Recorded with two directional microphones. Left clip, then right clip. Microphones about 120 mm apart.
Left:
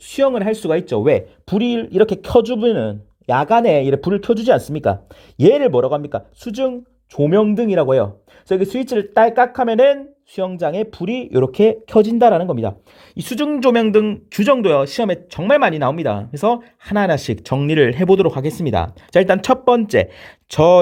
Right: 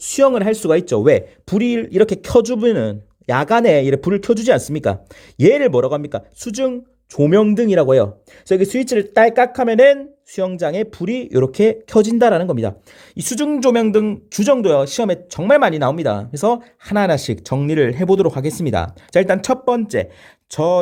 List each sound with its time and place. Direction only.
0.1 s speech: 20° right (ahead or behind)
4.4 s speech: centre (ahead or behind)
6.4 s speech: 15° right (ahead or behind)
13.1 s speech: 5° left (ahead or behind)
17.3 s speech: 25° left (ahead or behind)
18.2 s speech: 15° left (ahead or behind); by 20.7 s 55° left (ahead or behind)